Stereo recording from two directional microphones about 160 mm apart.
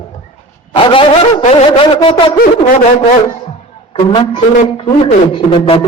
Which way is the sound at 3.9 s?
30° left (ahead or behind).